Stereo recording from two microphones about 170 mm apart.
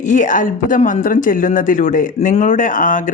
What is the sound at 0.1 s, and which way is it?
Speech, 50° left (ahead or behind).